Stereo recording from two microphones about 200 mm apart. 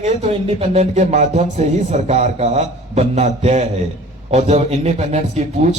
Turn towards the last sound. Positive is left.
turn(degrees=-30)  # may be behind; listen again after turning